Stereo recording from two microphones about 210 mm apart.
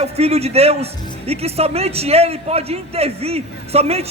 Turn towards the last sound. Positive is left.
turn(degrees=-30)  # may be behind; listen again after turning